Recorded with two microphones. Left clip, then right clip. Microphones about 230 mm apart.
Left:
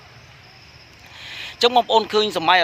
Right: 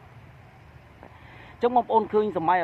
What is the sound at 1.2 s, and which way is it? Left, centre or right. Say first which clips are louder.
Speech: left 7 dB; left.